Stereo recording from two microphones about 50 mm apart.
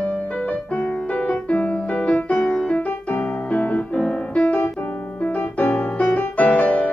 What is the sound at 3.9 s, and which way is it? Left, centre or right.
Music, centre.